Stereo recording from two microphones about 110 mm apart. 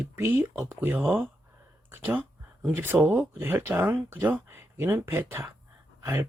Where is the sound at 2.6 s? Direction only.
20° right (ahead or behind).